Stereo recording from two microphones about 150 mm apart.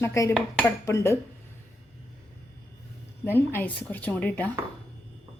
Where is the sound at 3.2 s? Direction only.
15° left (ahead or behind).